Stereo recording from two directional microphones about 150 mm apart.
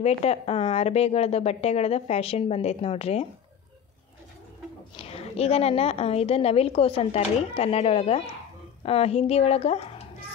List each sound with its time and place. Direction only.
0.0 s speech: 45° left (ahead or behind)
4.9 s a woman's voice: 40° left (ahead or behind)